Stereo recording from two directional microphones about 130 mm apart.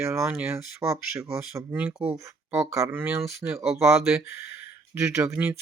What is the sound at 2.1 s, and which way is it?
Speech, 20° right (ahead or behind).